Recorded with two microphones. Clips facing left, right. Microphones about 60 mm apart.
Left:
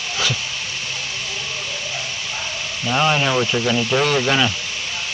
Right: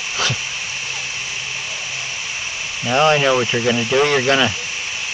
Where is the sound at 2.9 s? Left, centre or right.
Centre.